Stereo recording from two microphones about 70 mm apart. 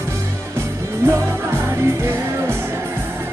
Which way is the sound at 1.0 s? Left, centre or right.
Right.